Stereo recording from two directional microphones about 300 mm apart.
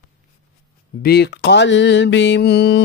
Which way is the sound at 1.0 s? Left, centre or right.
Left.